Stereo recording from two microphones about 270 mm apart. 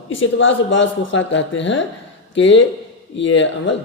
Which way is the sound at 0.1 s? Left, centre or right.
Left.